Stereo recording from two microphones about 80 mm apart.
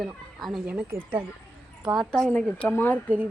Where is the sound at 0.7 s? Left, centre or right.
Centre.